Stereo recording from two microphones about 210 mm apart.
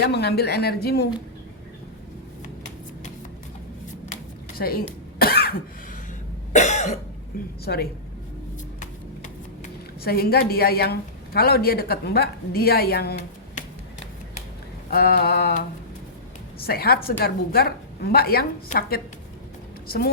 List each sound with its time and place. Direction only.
0.0 s a woman's voice: 50° left (ahead or behind)
4.5 s cough: 45° left (ahead or behind)
6.5 s cough: 35° left (ahead or behind)
7.6 s a woman's voice: 50° left (ahead or behind)
10.0 s a woman's voice: 45° left (ahead or behind)
14.8 s a woman's voice: 45° left (ahead or behind)